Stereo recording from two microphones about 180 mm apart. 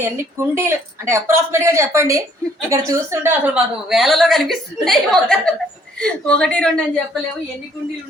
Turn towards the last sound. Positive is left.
turn(degrees=5)  # may be behind; listen again after turning